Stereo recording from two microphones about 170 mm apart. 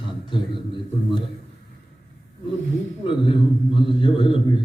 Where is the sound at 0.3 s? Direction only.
30° left (ahead or behind).